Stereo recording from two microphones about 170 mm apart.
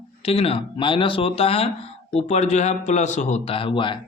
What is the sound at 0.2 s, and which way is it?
Speech, 35° left (ahead or behind).